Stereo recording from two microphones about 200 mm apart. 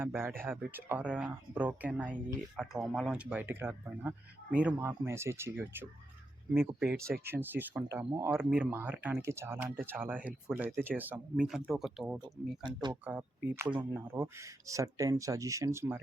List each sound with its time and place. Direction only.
0.0 s speech: 10° right (ahead or behind)
12.2 s speech: 20° right (ahead or behind)
13.1 s speech: 10° right (ahead or behind)